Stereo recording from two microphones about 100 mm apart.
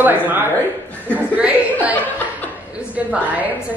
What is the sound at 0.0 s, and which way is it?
Speech, 20° right (ahead or behind).